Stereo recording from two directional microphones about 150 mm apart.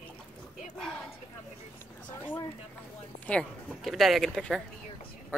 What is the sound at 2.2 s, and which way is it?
Speech, 15° left (ahead or behind).